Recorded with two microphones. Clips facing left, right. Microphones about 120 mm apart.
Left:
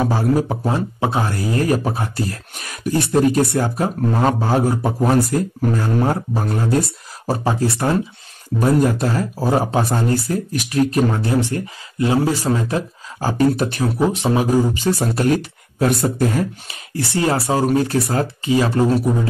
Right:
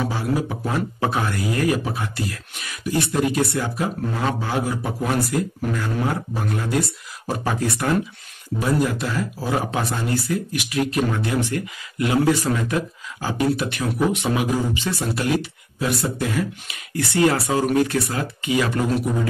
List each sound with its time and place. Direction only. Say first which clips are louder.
0.0 s speech: left 6 dB; 40° left (ahead or behind)
0.7 s speech: left 3 dB; 30° left (ahead or behind)
8.5 s speech: left 5 dB; 45° left (ahead or behind)